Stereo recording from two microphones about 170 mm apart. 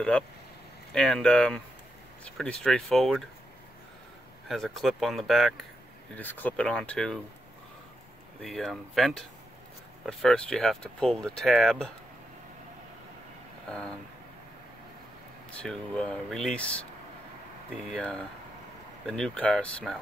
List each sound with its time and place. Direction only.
0.9 s speech: 5° left (ahead or behind)
4.5 s speech: centre (ahead or behind)
6.1 s speech: 10° left (ahead or behind)
8.4 s speech: centre (ahead or behind)
13.7 s speech: 5° left (ahead or behind)
15.6 s speech: 5° left (ahead or behind)
17.8 s speech: 5° left (ahead or behind)